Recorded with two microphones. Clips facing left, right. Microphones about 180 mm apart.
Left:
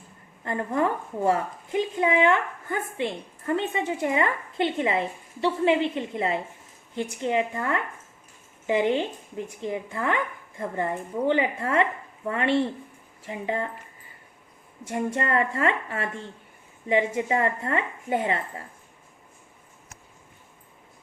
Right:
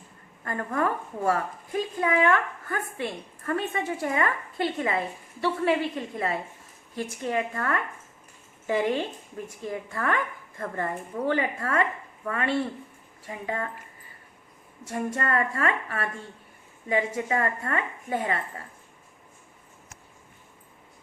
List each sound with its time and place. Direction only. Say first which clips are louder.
0.4 s a woman's voice: left 2 dB; 20° left (ahead or behind)
14.9 s a woman's voice: left 2 dB; 25° left (ahead or behind)